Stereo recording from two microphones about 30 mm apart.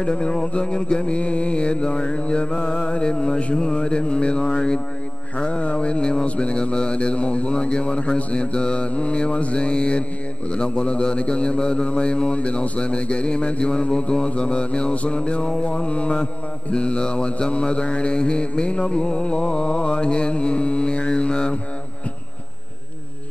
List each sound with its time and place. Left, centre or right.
0.0 s mantra: left
6.2 s mantra: left
6.5 s mantra: left
16.7 s mantra: left